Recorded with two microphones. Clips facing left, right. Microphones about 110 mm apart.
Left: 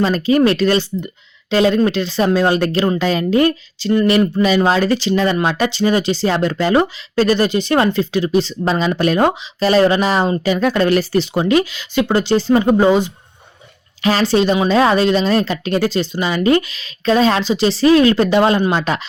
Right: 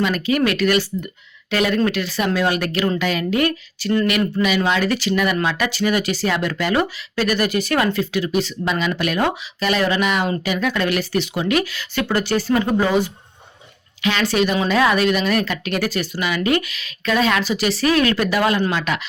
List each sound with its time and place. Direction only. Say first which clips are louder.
0.0 s a woman's voice: left 5 dB; 30° left (ahead or behind)
14.0 s a woman's voice: left 4 dB; 35° left (ahead or behind)